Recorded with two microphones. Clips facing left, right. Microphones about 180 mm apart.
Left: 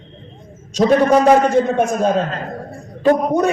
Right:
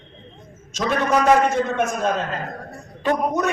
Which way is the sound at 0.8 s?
35° left (ahead or behind).